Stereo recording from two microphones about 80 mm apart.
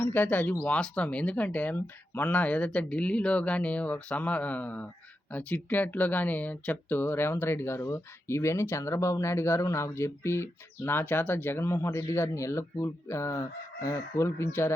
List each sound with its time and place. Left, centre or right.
0.0 s speech: left